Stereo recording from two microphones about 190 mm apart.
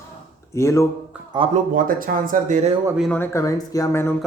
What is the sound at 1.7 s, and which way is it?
Speech, 45° right (ahead or behind).